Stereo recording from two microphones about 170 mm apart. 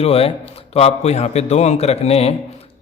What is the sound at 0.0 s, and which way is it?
A man's voice, 35° left (ahead or behind).